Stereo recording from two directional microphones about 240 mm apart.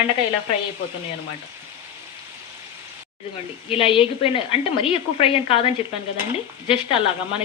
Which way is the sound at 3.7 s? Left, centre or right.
Left.